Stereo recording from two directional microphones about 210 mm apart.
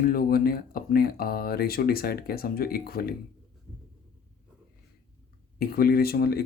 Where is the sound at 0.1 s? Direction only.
45° left (ahead or behind).